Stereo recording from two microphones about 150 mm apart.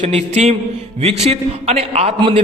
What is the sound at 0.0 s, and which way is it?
A man's voice, 45° right (ahead or behind).